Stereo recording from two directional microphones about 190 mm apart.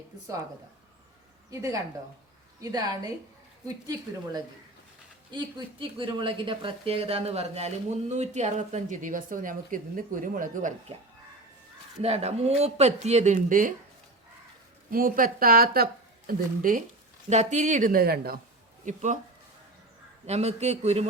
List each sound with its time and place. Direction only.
1.5 s a woman's voice: 20° right (ahead or behind); by 10.9 s 40° right (ahead or behind)
12.0 s speech: 35° right (ahead or behind)
14.8 s speech: 50° right (ahead or behind)
17.2 s speech: 35° right (ahead or behind); by 18.3 s 55° right (ahead or behind)
18.9 s speech: 40° right (ahead or behind)
20.2 s speech: 35° right (ahead or behind)